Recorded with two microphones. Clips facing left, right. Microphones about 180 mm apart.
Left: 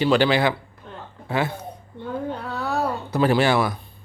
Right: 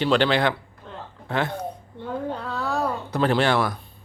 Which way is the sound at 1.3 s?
5° left (ahead or behind).